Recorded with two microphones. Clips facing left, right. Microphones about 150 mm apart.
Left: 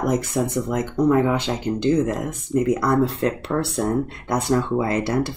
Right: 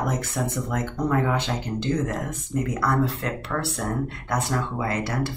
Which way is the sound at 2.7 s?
20° left (ahead or behind).